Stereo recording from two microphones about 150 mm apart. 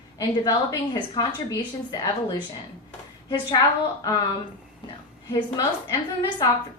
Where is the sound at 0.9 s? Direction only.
30° left (ahead or behind).